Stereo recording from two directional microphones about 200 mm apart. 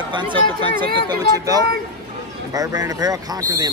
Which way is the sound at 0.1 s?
25° right (ahead or behind).